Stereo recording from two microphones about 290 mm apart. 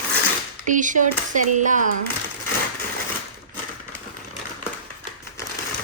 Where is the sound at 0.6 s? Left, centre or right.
Right.